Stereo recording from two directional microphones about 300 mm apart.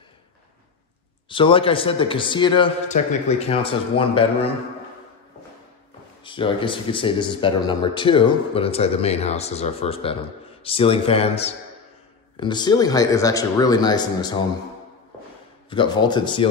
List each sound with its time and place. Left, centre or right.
1.3 s speech: centre
6.2 s speech: centre
15.7 s speech: centre